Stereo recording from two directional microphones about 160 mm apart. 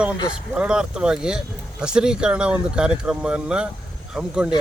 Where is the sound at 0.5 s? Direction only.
5° right (ahead or behind).